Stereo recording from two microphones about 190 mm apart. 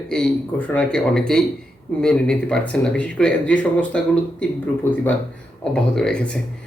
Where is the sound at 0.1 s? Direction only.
5° left (ahead or behind).